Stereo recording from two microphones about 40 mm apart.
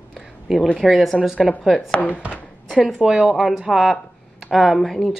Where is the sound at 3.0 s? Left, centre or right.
Centre.